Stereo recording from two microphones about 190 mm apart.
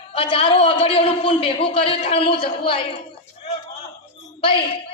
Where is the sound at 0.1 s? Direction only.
30° left (ahead or behind).